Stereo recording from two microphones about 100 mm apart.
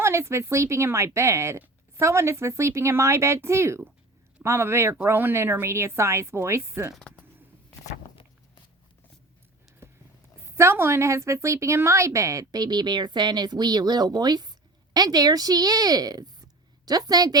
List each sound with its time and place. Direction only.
0.0 s speech: 25° right (ahead or behind)
9.8 s a sound: 25° right (ahead or behind)
10.5 s a woman's voice: 25° right (ahead or behind)